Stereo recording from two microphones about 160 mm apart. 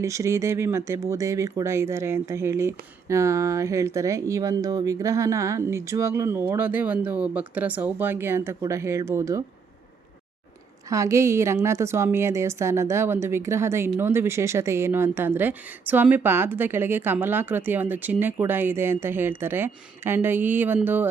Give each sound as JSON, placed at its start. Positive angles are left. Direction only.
{"t": 0.0, "sound": "speech", "side_deg": -20}
{"t": 10.8, "sound": "speech", "side_deg": -20}